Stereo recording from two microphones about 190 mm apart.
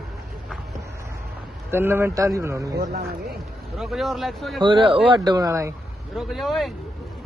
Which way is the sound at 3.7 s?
Centre (ahead or behind).